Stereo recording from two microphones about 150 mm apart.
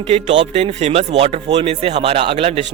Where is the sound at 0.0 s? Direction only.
40° right (ahead or behind).